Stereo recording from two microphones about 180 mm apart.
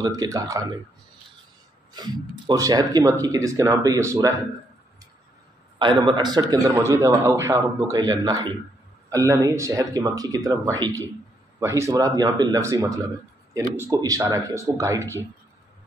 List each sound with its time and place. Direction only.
0.0 s speech: 20° right (ahead or behind)
2.0 s speech: 25° right (ahead or behind)
5.8 s speech: 25° right (ahead or behind)